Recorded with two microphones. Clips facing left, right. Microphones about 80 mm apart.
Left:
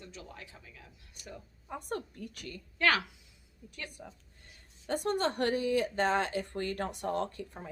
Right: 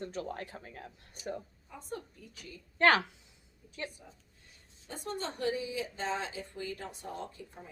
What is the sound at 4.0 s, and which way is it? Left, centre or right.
Speech, left.